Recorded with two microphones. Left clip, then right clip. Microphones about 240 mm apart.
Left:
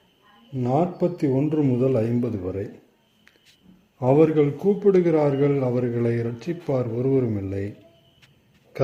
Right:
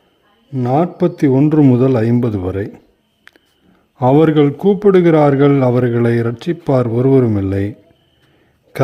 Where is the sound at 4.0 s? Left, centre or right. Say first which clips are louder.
Right 7 dB; right.